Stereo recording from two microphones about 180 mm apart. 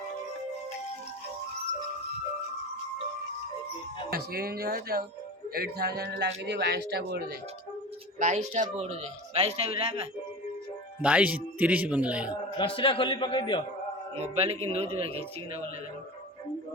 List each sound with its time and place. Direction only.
4.1 s speech: 60° right (ahead or behind)
8.2 s speech: 40° right (ahead or behind)
11.0 s a man's voice: 10° right (ahead or behind)
12.5 s a man's voice: 30° left (ahead or behind)
14.3 s speech: 35° right (ahead or behind)